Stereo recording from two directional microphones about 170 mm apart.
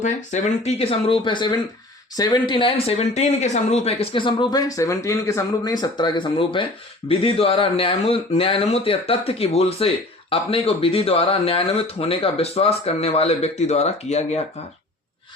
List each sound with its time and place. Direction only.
0.0 s speech: 45° left (ahead or behind)